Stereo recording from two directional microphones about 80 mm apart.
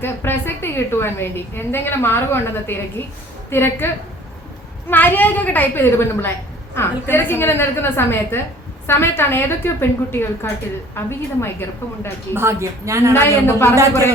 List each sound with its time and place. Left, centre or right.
0.0 s a woman's voice: left
12.3 s a woman's voice: right
13.1 s a woman's voice: left